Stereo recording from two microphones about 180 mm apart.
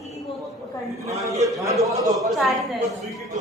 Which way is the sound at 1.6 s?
15° right (ahead or behind).